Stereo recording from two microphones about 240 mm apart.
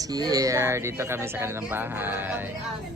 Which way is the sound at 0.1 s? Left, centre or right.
Centre.